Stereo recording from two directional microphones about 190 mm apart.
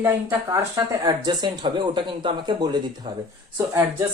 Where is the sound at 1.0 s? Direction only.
20° right (ahead or behind).